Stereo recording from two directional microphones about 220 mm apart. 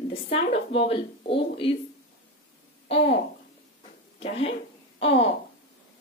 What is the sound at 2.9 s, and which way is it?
Speech, 25° left (ahead or behind).